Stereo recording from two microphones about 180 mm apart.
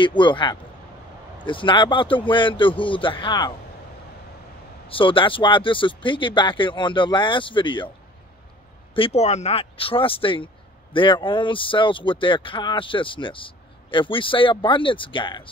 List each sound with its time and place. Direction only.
0.0 s speech: 25° left (ahead or behind)
4.8 s speech: 30° left (ahead or behind)
8.9 s speech: 35° left (ahead or behind)